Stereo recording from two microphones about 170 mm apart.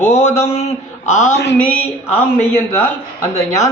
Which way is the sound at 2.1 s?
10° left (ahead or behind).